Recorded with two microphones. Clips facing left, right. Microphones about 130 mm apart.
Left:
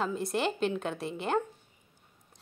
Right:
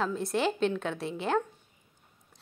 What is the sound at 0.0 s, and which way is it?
A woman's voice, centre (ahead or behind).